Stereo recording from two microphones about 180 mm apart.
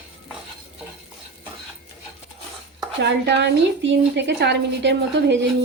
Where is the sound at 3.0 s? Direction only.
75° right (ahead or behind).